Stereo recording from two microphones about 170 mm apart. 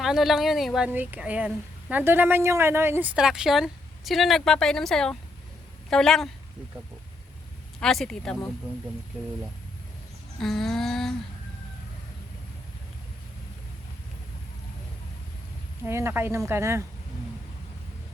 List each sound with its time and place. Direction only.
0.0 s a woman's voice: centre (ahead or behind)
7.8 s a woman's voice: 5° left (ahead or behind)
10.4 s a woman's voice: centre (ahead or behind)
15.8 s speech: 15° right (ahead or behind)